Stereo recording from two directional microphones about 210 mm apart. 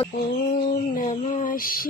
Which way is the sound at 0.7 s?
35° left (ahead or behind).